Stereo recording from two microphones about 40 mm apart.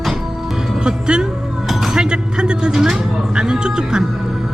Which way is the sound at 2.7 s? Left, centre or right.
Centre.